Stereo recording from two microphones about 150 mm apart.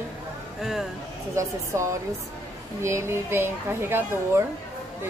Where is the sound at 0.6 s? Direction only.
5° right (ahead or behind).